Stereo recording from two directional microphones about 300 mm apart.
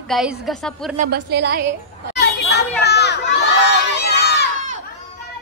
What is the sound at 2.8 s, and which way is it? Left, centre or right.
Crowd, left.